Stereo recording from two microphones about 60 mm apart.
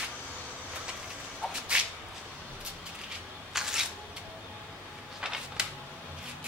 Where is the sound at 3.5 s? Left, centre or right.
Centre.